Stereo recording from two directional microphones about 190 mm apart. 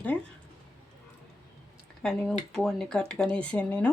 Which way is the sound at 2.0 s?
5° left (ahead or behind).